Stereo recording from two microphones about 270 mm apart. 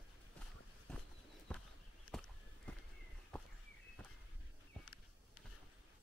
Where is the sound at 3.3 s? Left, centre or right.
Centre.